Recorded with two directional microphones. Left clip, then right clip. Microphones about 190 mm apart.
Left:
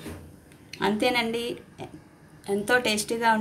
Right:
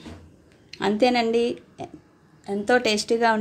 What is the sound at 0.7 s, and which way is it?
Speech, 40° right (ahead or behind).